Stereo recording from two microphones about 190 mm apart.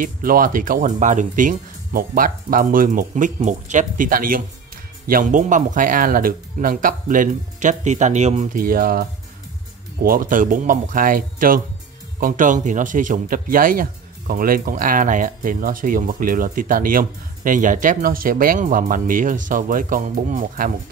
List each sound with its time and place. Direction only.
0.0 s speech: 50° right (ahead or behind)
10.0 s speech: 45° right (ahead or behind)